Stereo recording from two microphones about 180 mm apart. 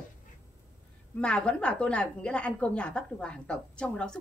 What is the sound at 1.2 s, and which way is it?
A woman's voice, 5° left (ahead or behind).